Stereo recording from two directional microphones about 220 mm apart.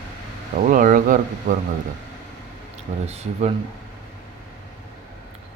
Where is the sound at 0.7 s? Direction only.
40° right (ahead or behind).